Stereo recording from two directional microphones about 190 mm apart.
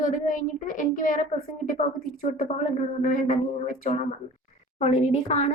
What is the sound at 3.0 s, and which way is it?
Speech, 45° left (ahead or behind).